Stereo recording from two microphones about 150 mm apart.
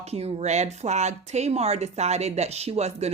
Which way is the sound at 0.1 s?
45° right (ahead or behind).